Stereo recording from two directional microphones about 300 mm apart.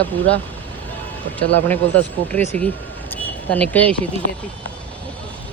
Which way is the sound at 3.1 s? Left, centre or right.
Centre.